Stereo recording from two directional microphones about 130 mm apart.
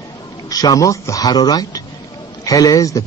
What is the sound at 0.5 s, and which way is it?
Speech, 30° left (ahead or behind).